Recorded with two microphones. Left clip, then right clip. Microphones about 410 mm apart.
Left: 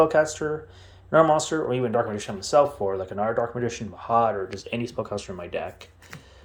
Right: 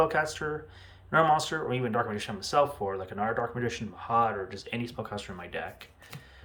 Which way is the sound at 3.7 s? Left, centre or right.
Centre.